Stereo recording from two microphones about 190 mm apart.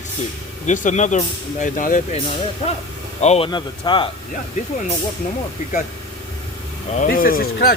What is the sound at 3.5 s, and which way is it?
Speech, 25° left (ahead or behind).